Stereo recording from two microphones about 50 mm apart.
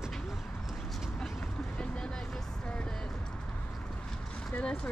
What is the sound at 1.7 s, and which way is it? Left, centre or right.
Vehicle, centre.